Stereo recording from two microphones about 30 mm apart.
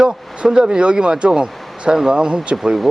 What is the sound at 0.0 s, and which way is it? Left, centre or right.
Speech, right.